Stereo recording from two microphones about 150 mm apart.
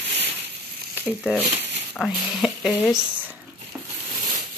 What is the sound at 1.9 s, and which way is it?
Speech, centre (ahead or behind).